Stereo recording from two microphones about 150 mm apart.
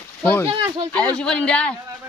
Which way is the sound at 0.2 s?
10° left (ahead or behind).